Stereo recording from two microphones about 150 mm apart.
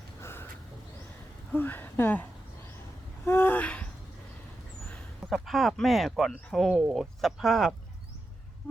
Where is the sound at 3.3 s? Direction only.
15° left (ahead or behind).